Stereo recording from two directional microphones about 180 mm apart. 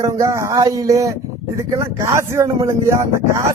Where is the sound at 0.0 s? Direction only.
15° right (ahead or behind).